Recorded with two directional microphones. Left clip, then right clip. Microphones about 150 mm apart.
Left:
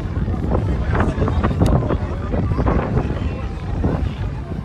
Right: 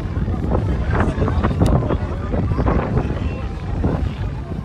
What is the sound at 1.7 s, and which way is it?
Wind noise, 10° left (ahead or behind).